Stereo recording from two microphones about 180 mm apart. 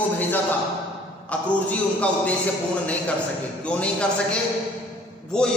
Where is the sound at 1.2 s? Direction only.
5° left (ahead or behind).